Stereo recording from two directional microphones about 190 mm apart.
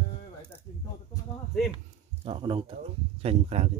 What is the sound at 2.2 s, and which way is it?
Speech, 30° right (ahead or behind).